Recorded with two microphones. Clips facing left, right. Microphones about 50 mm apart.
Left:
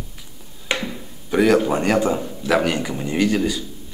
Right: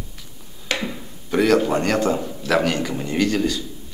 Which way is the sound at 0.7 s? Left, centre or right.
Left.